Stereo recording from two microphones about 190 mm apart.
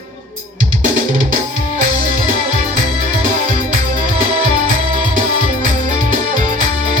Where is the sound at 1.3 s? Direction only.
45° right (ahead or behind).